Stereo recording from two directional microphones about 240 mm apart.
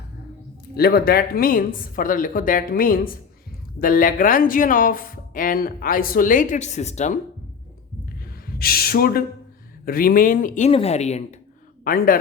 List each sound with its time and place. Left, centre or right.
0.8 s speech: left
8.5 s speech: left